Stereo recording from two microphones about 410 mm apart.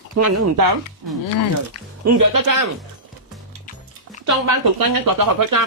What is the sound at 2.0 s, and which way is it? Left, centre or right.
Speech, right.